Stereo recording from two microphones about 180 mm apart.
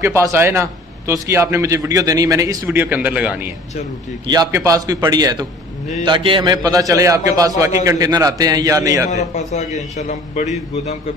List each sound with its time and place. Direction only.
0.0 s a man's voice: 15° right (ahead or behind)
4.3 s a man's voice: 15° right (ahead or behind)
9.1 s a man's voice: 40° left (ahead or behind)